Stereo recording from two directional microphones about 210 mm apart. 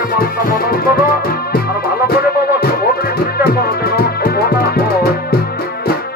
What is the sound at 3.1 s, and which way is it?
Music, 45° left (ahead or behind).